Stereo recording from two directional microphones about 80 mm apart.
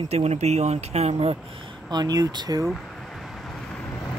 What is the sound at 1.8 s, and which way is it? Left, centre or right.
Speech, right.